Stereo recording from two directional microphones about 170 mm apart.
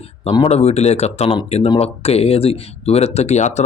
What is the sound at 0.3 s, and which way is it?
Speech, 35° left (ahead or behind).